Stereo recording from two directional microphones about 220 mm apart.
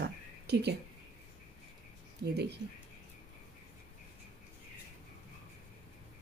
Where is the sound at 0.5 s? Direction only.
50° right (ahead or behind).